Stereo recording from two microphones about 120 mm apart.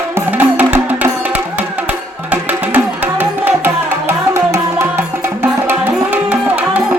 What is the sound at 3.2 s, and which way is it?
Music, 15° right (ahead or behind).